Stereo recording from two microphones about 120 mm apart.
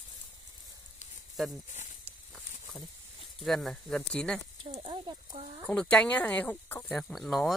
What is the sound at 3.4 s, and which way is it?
Speech, centre (ahead or behind).